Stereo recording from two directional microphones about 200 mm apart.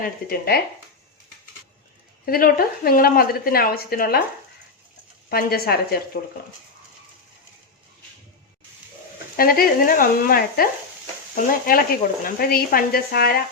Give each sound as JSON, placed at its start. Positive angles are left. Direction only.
{"t": 0.0, "sound": "a woman's voice", "side_deg": 50}
{"t": 2.2, "sound": "a woman's voice", "side_deg": 45}
{"t": 5.3, "sound": "a woman's voice", "side_deg": 50}
{"t": 9.3, "sound": "a woman's voice", "side_deg": 45}